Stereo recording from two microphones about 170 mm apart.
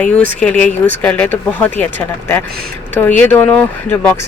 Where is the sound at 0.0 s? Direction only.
5° left (ahead or behind).